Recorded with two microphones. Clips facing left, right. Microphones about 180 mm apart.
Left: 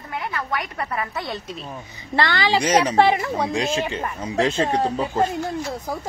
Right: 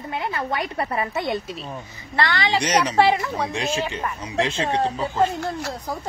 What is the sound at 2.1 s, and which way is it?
A woman's voice, 30° left (ahead or behind).